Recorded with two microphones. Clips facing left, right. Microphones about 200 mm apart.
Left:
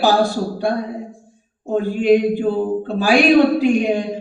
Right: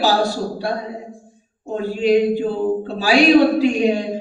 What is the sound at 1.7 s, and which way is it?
Speech, 50° left (ahead or behind).